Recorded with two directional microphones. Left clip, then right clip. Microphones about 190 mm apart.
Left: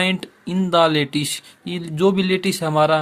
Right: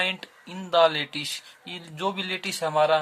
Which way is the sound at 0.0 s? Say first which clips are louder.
Left 6 dB; 35° left (ahead or behind).